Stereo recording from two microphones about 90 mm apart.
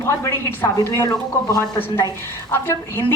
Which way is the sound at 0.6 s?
25° left (ahead or behind).